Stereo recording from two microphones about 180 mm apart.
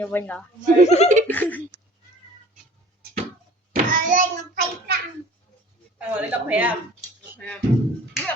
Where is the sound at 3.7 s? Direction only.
45° right (ahead or behind).